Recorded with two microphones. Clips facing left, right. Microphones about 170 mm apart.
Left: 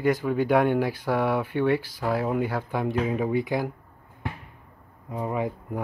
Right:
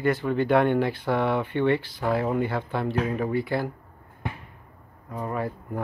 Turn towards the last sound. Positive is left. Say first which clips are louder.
# left 1 dB
turn(degrees=15)  # may be behind; listen again after turning